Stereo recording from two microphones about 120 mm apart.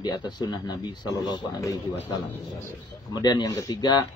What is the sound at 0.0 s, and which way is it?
A man's voice, 35° left (ahead or behind).